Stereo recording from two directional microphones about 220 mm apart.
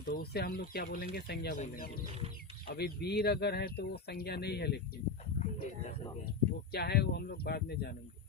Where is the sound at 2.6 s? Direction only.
45° left (ahead or behind).